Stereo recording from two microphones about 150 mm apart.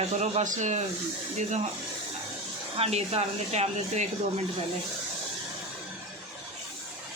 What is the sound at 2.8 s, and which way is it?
A man's voice, 45° right (ahead or behind).